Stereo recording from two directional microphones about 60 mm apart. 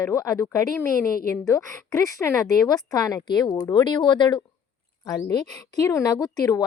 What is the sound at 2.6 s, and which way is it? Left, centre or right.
Speech, left.